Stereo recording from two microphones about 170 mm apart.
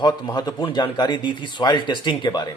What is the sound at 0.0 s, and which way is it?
Speech, 25° left (ahead or behind).